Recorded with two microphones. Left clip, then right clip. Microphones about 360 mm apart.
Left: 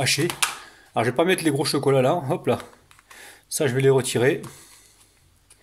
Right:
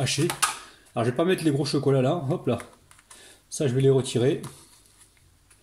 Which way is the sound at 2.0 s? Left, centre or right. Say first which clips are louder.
Left 4 dB; left.